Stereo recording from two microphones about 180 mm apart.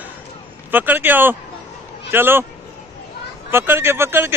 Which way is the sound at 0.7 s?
10° right (ahead or behind).